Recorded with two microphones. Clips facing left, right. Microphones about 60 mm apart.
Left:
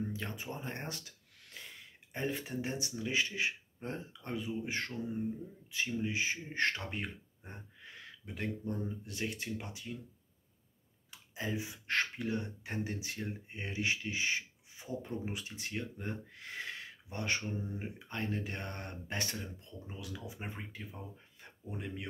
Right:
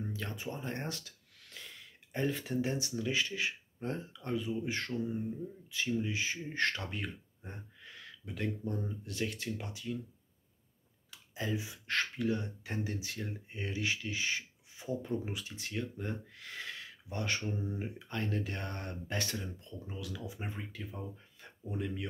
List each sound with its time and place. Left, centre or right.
0.1 s speech: left
11.1 s speech: left
21.4 s a sound: left